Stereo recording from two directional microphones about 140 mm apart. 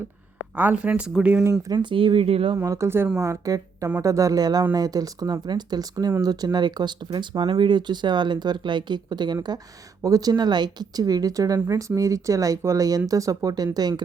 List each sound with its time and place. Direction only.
0.5 s speech: 10° right (ahead or behind)
1.6 s speech: 30° right (ahead or behind)
2.6 s speech: 20° right (ahead or behind)